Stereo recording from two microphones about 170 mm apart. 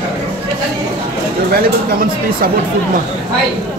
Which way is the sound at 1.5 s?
60° right (ahead or behind).